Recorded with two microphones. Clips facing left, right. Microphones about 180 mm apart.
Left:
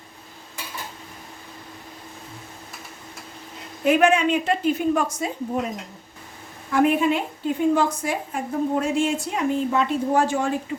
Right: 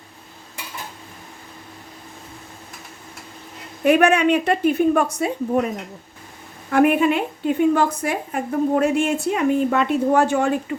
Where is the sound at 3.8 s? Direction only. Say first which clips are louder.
Right 3 dB; 65° right (ahead or behind).